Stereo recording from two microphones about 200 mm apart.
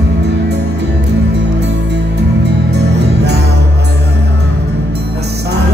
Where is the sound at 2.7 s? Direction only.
55° right (ahead or behind).